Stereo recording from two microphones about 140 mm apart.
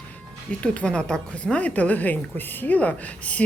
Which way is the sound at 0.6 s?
5° left (ahead or behind).